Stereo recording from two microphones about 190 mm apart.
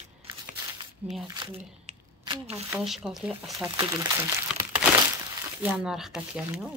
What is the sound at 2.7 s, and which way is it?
Speech, 5° right (ahead or behind).